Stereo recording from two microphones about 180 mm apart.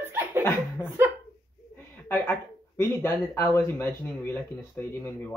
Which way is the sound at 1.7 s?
10° left (ahead or behind).